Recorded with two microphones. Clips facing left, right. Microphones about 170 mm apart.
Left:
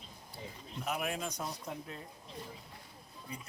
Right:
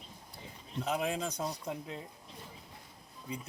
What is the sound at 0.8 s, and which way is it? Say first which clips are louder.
A man's voice: right 3 dB; 25° right (ahead or behind).